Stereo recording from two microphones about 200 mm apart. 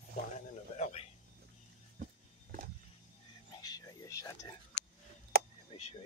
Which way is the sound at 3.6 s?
15° left (ahead or behind).